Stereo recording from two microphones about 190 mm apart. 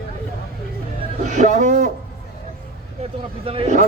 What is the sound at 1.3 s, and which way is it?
Speech, 40° right (ahead or behind).